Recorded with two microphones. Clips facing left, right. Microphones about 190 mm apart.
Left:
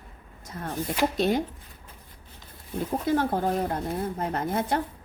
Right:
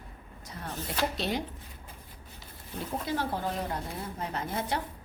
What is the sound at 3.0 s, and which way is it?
Speech, 50° left (ahead or behind).